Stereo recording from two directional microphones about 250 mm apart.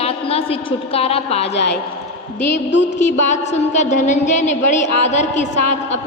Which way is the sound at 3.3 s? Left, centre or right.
Left.